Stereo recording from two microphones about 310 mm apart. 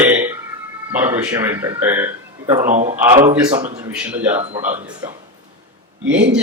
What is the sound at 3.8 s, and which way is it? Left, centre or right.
Speech, centre.